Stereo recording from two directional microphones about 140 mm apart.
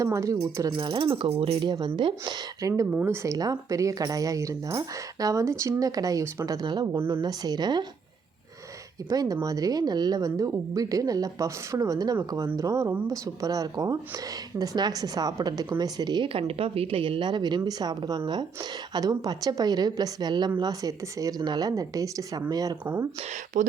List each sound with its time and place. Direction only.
0.0 s speech: 25° right (ahead or behind)
0.8 s a woman's voice: 35° right (ahead or behind)
2.9 s speech: 10° right (ahead or behind)
3.2 s speech: 25° right (ahead or behind)
6.9 s speech: 15° right (ahead or behind)
7.2 s speech: 30° right (ahead or behind)
9.0 s a woman's voice: 25° right (ahead or behind)
23.6 s speech: 65° right (ahead or behind)